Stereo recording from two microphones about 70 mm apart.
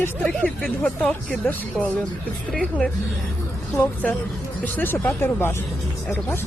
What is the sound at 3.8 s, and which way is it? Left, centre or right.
A woman's voice, left.